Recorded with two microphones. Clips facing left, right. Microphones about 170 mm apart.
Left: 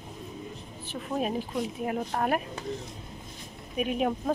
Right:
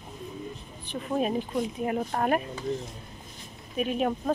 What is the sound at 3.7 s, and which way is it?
Speech, 10° left (ahead or behind).